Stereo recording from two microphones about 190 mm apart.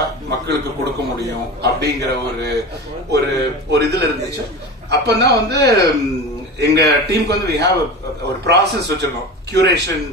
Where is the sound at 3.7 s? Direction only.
60° right (ahead or behind).